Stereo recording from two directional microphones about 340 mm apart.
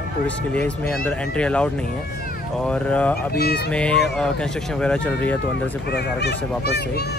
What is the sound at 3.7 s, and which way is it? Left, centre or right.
Speech, centre.